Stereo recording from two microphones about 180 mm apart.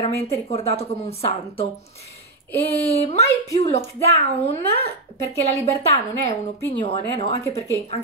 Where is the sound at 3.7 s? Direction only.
35° left (ahead or behind).